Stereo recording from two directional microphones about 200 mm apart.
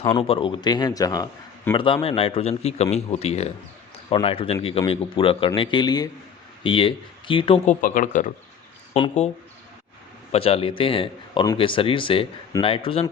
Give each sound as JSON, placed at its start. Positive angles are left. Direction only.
{"t": 0.1, "sound": "a man's voice", "side_deg": 25}
{"t": 10.3, "sound": "a man's voice", "side_deg": 30}